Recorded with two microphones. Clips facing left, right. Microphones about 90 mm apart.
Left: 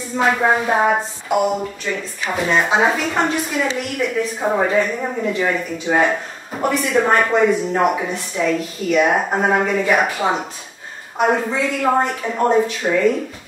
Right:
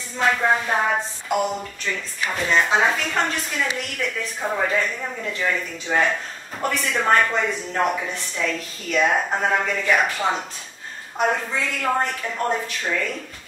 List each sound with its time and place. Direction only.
0.2 s speech: 15° left (ahead or behind)